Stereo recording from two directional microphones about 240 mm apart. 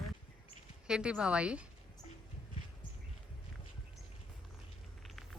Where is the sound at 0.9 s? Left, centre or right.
Centre.